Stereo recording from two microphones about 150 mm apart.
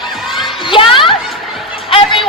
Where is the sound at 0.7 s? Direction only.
35° left (ahead or behind).